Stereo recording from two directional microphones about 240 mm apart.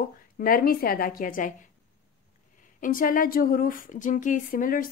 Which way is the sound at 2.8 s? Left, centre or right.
Left.